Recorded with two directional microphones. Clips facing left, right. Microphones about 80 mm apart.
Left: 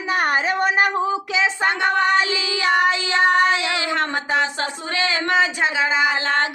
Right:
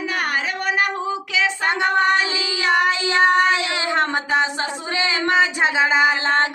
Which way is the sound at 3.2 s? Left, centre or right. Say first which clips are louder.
Right 1 dB; right.